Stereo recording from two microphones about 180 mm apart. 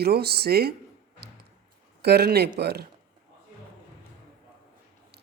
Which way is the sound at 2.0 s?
65° right (ahead or behind).